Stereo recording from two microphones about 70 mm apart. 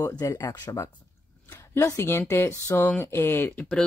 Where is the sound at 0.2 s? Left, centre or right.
Left.